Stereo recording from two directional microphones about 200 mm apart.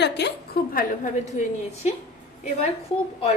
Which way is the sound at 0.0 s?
60° left (ahead or behind).